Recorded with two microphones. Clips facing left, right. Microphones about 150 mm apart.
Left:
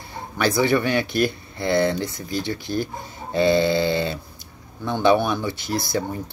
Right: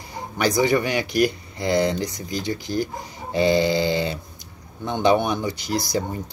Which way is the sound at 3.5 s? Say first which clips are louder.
Left 1 dB; 15° right (ahead or behind).